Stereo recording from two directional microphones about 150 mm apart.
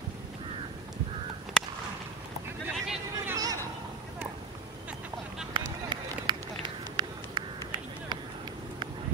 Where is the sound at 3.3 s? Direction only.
25° right (ahead or behind).